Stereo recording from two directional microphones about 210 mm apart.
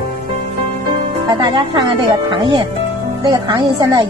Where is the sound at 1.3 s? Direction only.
20° right (ahead or behind).